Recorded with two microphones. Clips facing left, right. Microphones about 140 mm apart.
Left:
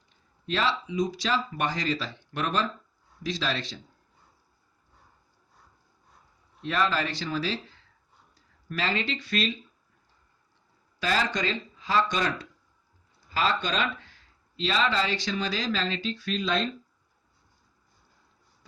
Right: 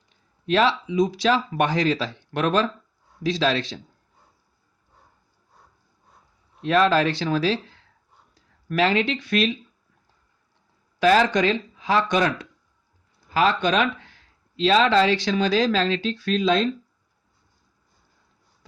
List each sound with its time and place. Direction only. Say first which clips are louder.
0.4 s speech: right 8 dB; 70° right (ahead or behind); by 3.8 s 85° right
6.6 s speech: right 8 dB; 85° right
8.7 s speech: right 9 dB; 65° right (ahead or behind)
11.0 s speech: right 10 dB; 65° right (ahead or behind)
14.5 s speech: right 9 dB; 80° right